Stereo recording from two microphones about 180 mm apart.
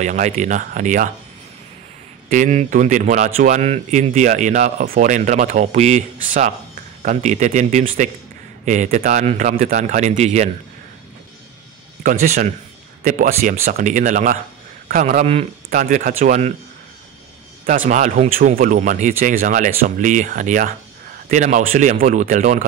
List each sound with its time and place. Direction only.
0.0 s speech: 40° right (ahead or behind)
2.2 s a man's voice: 40° right (ahead or behind)
12.0 s speech: 45° right (ahead or behind)
17.6 s speech: 45° right (ahead or behind)